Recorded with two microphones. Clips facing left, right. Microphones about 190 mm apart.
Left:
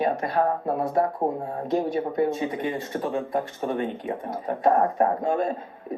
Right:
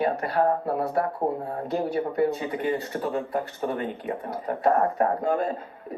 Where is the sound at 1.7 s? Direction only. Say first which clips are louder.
Left 2 dB; 20° left (ahead or behind).